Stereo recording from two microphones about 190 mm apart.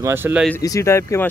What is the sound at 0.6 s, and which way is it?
Speech, 15° left (ahead or behind).